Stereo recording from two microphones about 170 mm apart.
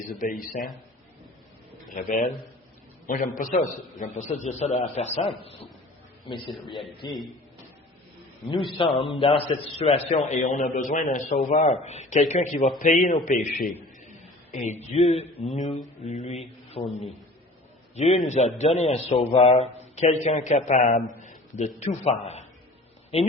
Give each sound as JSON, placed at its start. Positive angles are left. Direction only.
{"t": 0.1, "sound": "a man's voice", "side_deg": 55}
{"t": 0.5, "sound": "a man's voice", "side_deg": 0}
{"t": 1.9, "sound": "a man's voice", "side_deg": 50}
{"t": 6.5, "sound": "a man's voice", "side_deg": 0}
{"t": 7.0, "sound": "a man's voice", "side_deg": 25}
{"t": 9.0, "sound": "a man's voice", "side_deg": 30}
{"t": 17.9, "sound": "a man's voice", "side_deg": 40}
{"t": 21.2, "sound": "a sound", "side_deg": 45}
{"t": 21.8, "sound": "a man's voice", "side_deg": 40}